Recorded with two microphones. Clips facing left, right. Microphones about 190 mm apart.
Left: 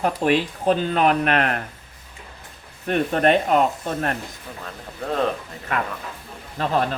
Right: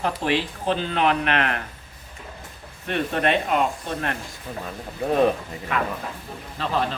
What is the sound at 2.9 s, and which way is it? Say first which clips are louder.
Speech: left 4 dB; 40° left (ahead or behind).